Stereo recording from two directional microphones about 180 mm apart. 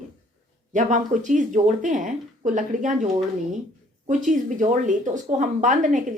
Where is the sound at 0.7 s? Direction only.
45° right (ahead or behind).